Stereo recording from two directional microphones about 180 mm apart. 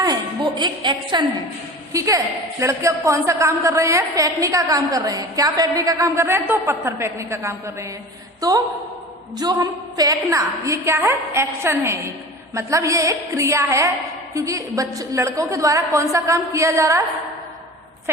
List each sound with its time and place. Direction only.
0.6 s a woman's voice: 25° right (ahead or behind)